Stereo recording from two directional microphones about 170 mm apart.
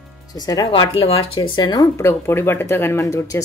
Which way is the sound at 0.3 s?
20° left (ahead or behind).